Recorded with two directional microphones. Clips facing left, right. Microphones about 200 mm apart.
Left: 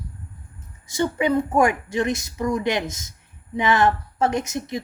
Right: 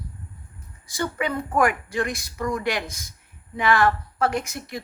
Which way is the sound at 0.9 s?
20° left (ahead or behind).